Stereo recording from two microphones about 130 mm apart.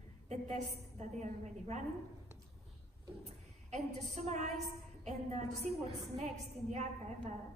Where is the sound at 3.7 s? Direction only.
60° right (ahead or behind).